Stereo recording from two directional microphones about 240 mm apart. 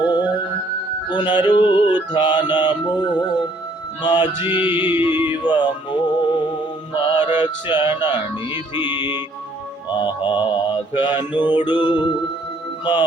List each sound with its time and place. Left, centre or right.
0.0 s music: centre
4.4 s music: centre
5.5 s music: centre
6.9 s mantra: centre
7.4 s music: centre
9.9 s music: centre